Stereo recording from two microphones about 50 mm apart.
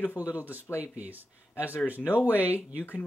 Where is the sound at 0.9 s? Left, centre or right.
Right.